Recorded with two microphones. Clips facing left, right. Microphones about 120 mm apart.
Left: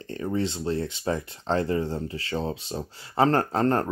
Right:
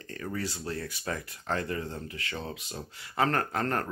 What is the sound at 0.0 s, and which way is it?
Speech, 25° left (ahead or behind).